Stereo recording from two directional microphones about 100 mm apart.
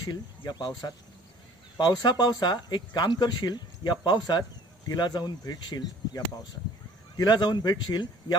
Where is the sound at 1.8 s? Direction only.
45° left (ahead or behind).